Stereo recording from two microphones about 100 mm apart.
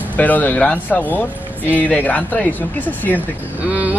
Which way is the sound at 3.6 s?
15° right (ahead or behind).